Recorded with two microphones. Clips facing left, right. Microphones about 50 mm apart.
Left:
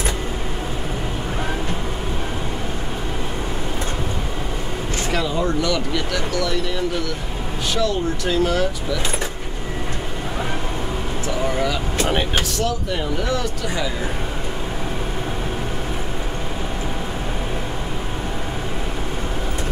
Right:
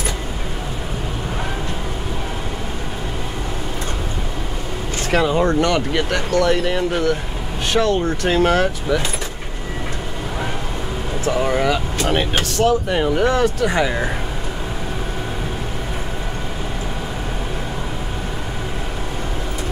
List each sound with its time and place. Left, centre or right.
5.1 s speech: right
12.1 s speech: centre
12.6 s speech: right